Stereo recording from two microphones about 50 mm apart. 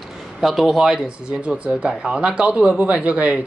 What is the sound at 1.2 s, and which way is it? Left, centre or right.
Speech, right.